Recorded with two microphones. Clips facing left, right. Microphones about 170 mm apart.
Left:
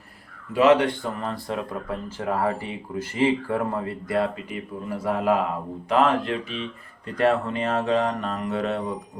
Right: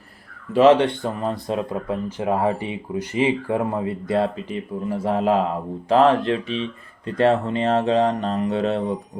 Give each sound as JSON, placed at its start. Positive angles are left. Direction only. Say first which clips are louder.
{"t": 0.5, "sound": "speech", "louder": "right 3 dB", "side_deg": -35}